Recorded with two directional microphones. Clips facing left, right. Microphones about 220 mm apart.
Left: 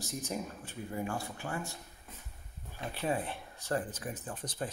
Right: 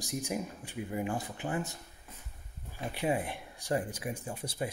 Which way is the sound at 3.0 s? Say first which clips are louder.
Right 2 dB; 15° right (ahead or behind).